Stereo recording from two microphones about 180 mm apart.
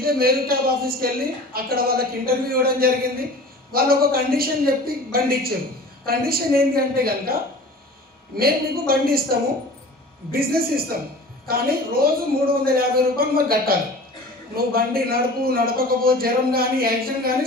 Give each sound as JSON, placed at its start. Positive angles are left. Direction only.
{"t": 0.0, "sound": "a man's voice", "side_deg": -55}
{"t": 8.4, "sound": "a man's voice", "side_deg": -55}